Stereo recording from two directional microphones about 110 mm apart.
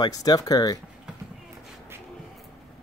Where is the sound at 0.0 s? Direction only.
35° left (ahead or behind).